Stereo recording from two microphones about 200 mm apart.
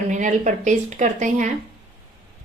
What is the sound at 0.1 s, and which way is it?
A woman's voice, 40° right (ahead or behind).